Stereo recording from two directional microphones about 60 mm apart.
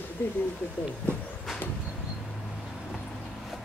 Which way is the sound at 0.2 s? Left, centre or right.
Left.